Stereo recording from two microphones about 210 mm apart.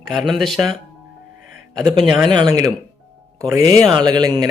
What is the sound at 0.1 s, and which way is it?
Speech, centre (ahead or behind).